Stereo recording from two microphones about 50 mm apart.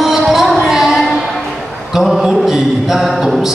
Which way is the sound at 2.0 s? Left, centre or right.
Centre.